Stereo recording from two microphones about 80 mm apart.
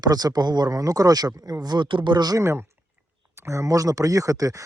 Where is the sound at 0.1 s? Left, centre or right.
Right.